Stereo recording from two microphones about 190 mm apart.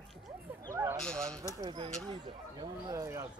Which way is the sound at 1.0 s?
5° left (ahead or behind).